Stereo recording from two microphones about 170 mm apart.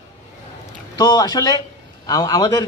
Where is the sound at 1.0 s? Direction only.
25° left (ahead or behind).